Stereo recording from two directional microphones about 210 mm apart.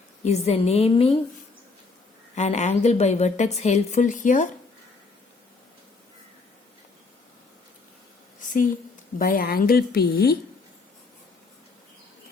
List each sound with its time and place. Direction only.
0.3 s a woman's voice: 30° left (ahead or behind)
2.3 s a woman's voice: 35° left (ahead or behind)
8.4 s a sound: 40° left (ahead or behind)
9.1 s a woman's voice: 45° left (ahead or behind)